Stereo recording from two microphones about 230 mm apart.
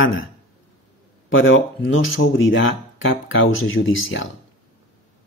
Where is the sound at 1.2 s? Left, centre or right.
Left.